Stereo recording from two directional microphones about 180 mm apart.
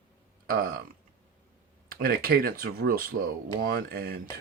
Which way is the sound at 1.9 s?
55° right (ahead or behind).